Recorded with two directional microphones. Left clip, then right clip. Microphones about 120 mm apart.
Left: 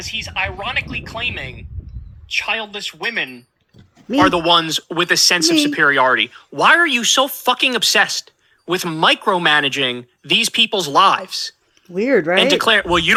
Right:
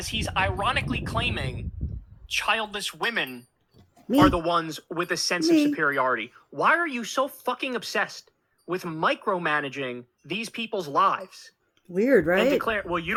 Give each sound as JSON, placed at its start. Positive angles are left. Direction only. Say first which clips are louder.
{"t": 0.0, "sound": "speech", "louder": "left 4 dB", "side_deg": 20}
{"t": 4.2, "sound": "speech", "louder": "left 8 dB", "side_deg": 50}
{"t": 11.9, "sound": "speech", "louder": "left 6 dB", "side_deg": 0}
{"t": 12.5, "sound": "speech", "louder": "left 10 dB", "side_deg": 60}